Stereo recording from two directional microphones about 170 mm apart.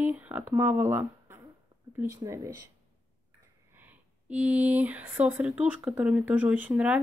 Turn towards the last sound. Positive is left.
turn(degrees=-10)  # may be behind; listen again after turning